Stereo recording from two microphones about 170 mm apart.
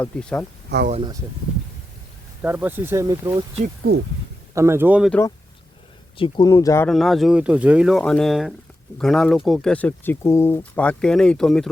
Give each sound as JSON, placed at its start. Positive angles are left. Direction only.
{"t": 0.0, "sound": "speech", "side_deg": 5}
{"t": 0.7, "sound": "speech", "side_deg": -90}
{"t": 2.4, "sound": "speech", "side_deg": -10}
{"t": 4.5, "sound": "speech", "side_deg": -15}
{"t": 6.1, "sound": "speech", "side_deg": 30}
{"t": 6.5, "sound": "speech", "side_deg": 20}
{"t": 6.8, "sound": "speech", "side_deg": 0}